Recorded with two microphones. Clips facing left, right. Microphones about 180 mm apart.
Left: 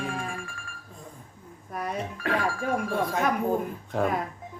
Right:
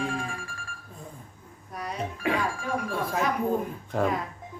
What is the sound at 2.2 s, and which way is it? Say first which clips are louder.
Speech: right 1 dB; 15° right (ahead or behind).